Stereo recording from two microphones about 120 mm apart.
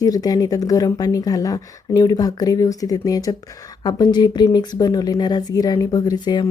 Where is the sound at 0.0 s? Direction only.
30° left (ahead or behind).